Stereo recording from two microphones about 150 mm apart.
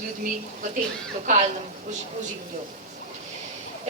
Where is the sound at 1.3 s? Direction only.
55° right (ahead or behind).